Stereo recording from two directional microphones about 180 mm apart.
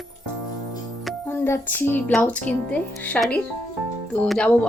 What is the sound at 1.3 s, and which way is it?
Speech, 10° left (ahead or behind).